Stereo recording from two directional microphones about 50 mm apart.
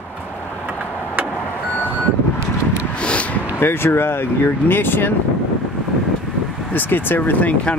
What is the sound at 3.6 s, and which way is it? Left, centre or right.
Speech, left.